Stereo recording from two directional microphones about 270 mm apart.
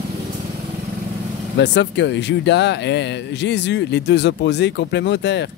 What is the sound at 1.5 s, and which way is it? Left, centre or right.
Speech, left.